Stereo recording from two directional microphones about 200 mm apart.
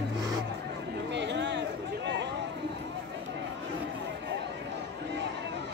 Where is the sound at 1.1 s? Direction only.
60° right (ahead or behind).